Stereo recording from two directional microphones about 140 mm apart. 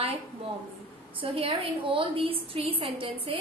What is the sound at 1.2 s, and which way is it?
A woman's voice, 40° right (ahead or behind).